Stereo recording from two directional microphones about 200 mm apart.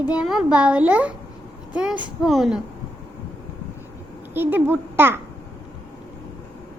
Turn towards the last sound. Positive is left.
turn(degrees=-10)  # may be behind; listen again after turning